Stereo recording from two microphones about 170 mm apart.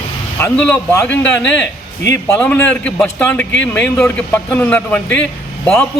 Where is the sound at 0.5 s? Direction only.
5° left (ahead or behind).